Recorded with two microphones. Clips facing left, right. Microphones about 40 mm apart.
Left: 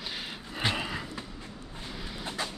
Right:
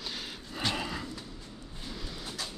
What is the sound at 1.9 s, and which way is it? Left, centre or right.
Vehicle, centre.